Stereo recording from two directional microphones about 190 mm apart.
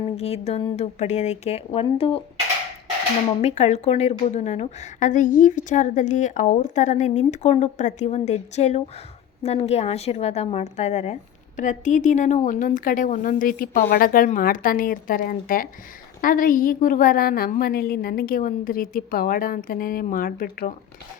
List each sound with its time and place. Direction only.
0.2 s speech: 35° left (ahead or behind)
3.2 s a woman's voice: 35° left (ahead or behind)